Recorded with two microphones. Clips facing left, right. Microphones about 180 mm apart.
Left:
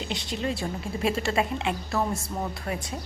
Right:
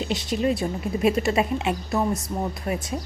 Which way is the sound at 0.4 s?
20° right (ahead or behind).